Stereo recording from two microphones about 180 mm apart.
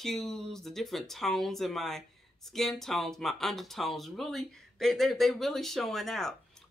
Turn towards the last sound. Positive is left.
turn(degrees=0)  # may be behind; listen again after turning